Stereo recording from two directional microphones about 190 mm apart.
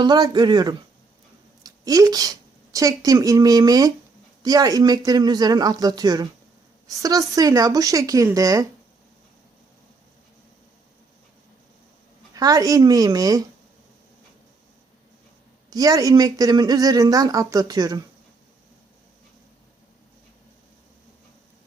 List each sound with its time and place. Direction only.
0.0 s speech: 20° right (ahead or behind)
12.3 s speech: 20° right (ahead or behind)
15.7 s speech: 20° right (ahead or behind)